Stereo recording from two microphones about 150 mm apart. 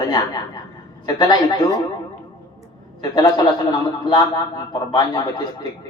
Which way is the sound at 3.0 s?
25° left (ahead or behind).